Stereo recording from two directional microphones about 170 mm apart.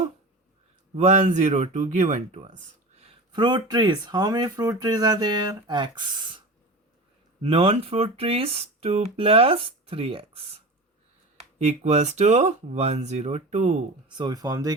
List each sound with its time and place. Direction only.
0.9 s speech: 45° right (ahead or behind)
3.3 s speech: 25° right (ahead or behind)
7.4 s speech: 35° right (ahead or behind)
11.6 s speech: 40° right (ahead or behind)
14.2 s speech: 25° right (ahead or behind)